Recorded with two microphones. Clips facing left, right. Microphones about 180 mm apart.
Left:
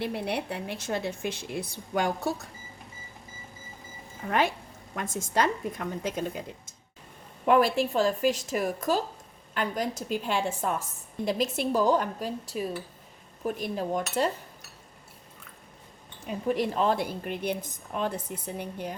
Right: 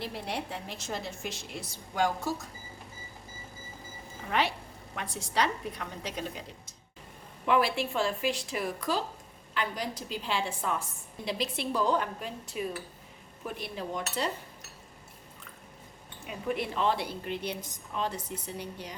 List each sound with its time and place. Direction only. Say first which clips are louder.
0.0 s a woman's voice: left 5 dB; 60° left (ahead or behind)
4.3 s a woman's voice: left 3 dB; 50° left (ahead or behind)
7.4 s a woman's voice: left 5 dB; 45° left (ahead or behind)
16.2 s a woman's voice: left 5 dB; 40° left (ahead or behind); by 18.9 s 55° left (ahead or behind)